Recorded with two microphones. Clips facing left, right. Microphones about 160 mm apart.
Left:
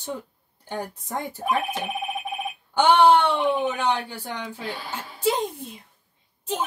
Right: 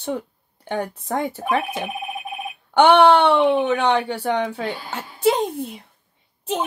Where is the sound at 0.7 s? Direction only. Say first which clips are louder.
Right 6 dB; 75° right (ahead or behind).